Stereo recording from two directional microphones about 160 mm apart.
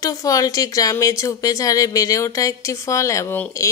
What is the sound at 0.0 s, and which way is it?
Speech, 20° left (ahead or behind).